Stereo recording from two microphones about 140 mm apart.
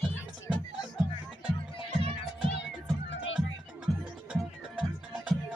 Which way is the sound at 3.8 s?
10° right (ahead or behind).